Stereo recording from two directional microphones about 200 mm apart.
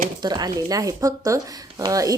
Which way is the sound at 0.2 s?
20° right (ahead or behind).